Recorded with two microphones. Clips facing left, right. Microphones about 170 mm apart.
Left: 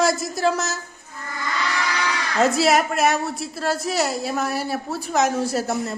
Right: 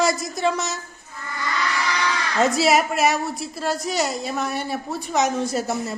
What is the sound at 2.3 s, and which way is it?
A woman's voice, centre (ahead or behind).